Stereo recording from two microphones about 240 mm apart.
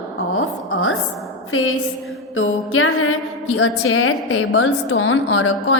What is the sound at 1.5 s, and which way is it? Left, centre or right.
A woman's voice, left.